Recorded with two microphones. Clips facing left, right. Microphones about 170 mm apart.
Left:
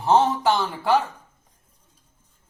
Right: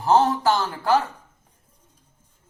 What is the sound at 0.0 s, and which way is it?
Speech, centre (ahead or behind).